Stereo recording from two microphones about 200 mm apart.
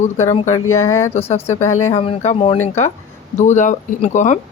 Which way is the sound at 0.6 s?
90° left.